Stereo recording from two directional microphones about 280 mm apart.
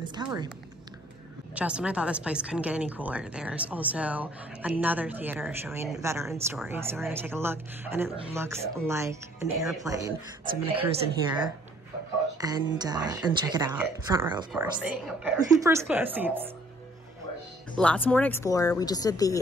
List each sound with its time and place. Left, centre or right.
0.0 s a sound: centre
1.5 s a woman's voice: centre
14.5 s a woman's voice: centre
17.7 s speech: centre